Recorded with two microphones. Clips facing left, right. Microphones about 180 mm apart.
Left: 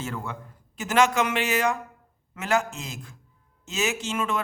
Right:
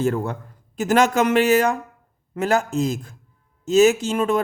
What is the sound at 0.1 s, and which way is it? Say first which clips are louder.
Speech: right 9 dB; 40° right (ahead or behind).